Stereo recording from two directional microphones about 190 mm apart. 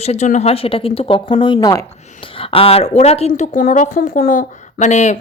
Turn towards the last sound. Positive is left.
turn(degrees=40)  # may be behind; listen again after turning